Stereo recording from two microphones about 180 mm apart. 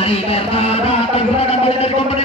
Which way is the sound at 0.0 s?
35° left (ahead or behind).